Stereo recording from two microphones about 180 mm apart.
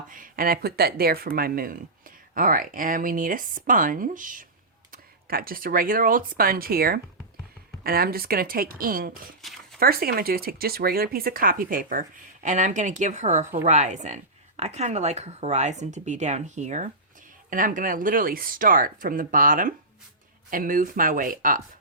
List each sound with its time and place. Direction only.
0.1 s speech: 50° right (ahead or behind)